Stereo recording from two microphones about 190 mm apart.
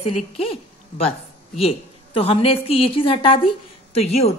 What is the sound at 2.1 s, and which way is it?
A woman's voice, 30° left (ahead or behind).